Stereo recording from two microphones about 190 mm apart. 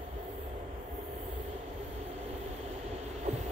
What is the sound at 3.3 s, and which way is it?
Heart murmur, 35° right (ahead or behind).